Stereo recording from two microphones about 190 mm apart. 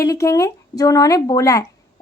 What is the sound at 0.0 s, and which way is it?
Speech, 15° left (ahead or behind).